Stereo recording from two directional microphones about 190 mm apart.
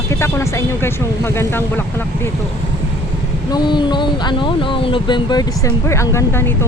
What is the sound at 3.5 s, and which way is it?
Speech, 20° left (ahead or behind).